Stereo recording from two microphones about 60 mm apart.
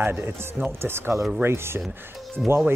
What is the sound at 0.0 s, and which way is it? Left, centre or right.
Speech, right.